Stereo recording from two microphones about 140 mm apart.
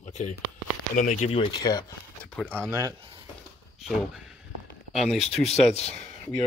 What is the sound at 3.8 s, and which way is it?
Speech, centre (ahead or behind).